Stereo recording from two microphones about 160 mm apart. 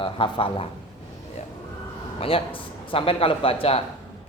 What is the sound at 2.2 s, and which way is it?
Speech, 35° left (ahead or behind).